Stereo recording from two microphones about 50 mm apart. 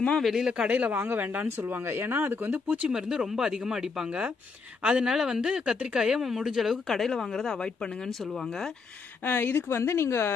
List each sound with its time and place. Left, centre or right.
0.2 s speech: centre
0.5 s speech: centre
0.7 s speech: right
1.0 s speech: right
2.8 s speech: centre
6.9 s a woman's voice: centre
9.3 s speech: left